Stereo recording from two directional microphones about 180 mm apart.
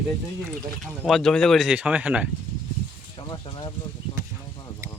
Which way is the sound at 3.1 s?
25° left (ahead or behind).